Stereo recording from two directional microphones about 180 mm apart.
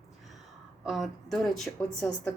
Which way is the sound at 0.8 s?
Centre (ahead or behind).